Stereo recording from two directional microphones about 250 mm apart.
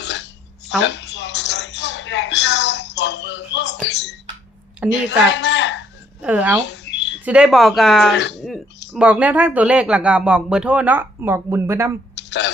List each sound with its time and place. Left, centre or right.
0.0 s a sound: left
0.8 s music: left
4.9 s a woman's voice: left
6.2 s a woman's voice: centre
6.7 s a sound: left
7.3 s speech: centre
8.1 s speech: left
8.9 s speech: centre
12.1 s a sound: left